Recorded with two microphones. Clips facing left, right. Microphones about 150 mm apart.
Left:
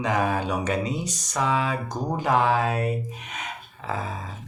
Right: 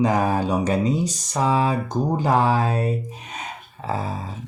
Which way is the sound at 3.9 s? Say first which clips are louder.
Right 3 dB; 35° right (ahead or behind).